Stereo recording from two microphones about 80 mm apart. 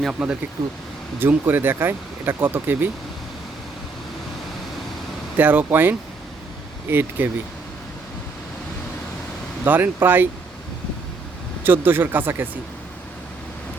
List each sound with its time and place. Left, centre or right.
0.0 s speech: centre
1.2 s speech: right
5.4 s speech: right
9.6 s speech: right
11.6 s speech: right